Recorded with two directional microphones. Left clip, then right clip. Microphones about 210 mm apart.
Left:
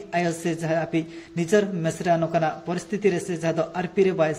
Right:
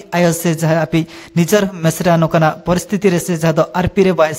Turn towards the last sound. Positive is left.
turn(degrees=-45)  # may be behind; listen again after turning